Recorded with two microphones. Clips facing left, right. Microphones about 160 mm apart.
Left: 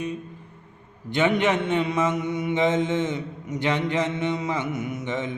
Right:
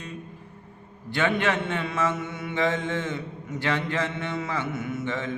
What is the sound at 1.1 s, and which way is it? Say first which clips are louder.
Mantra: left 3 dB; 20° left (ahead or behind).